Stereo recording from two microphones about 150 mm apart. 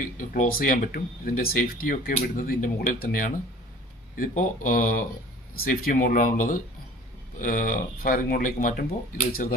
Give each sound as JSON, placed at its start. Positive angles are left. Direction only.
{"t": 0.0, "sound": "speech", "side_deg": 60}
{"t": 5.5, "sound": "speech", "side_deg": 75}